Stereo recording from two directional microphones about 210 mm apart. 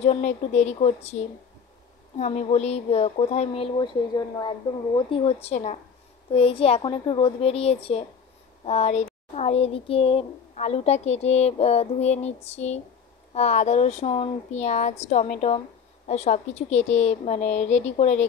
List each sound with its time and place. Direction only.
0.0 s speech: 30° left (ahead or behind)
2.1 s speech: 30° left (ahead or behind)